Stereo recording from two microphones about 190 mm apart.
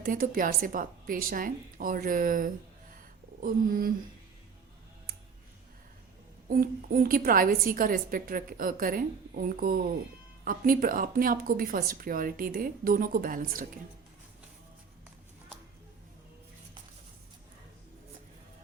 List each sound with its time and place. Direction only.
0.0 s a woman's voice: 50° right (ahead or behind)
6.5 s a woman's voice: 50° right (ahead or behind)